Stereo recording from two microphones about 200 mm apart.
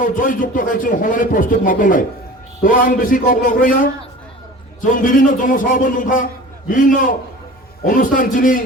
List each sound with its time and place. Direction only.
0.0 s a man's voice: 45° left (ahead or behind)